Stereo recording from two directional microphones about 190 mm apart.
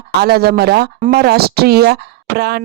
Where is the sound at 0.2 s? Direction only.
55° right (ahead or behind).